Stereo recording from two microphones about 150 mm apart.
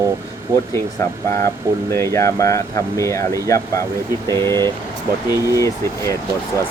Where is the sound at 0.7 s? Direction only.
20° left (ahead or behind).